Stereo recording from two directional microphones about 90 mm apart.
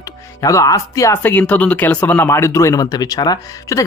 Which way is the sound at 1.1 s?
20° left (ahead or behind).